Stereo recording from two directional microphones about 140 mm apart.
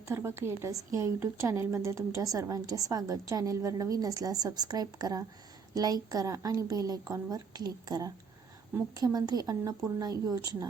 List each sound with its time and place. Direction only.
0.1 s speech: 20° right (ahead or behind)